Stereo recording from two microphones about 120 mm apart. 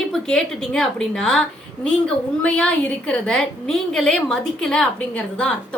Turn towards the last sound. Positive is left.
turn(degrees=5)  # may be behind; listen again after turning